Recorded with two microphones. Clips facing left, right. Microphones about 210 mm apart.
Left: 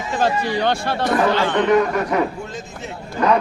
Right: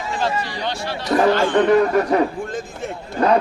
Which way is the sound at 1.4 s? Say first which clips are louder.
Right 2 dB; 50° right (ahead or behind).